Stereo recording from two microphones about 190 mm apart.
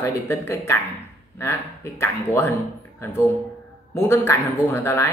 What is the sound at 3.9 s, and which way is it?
Speech, 10° left (ahead or behind).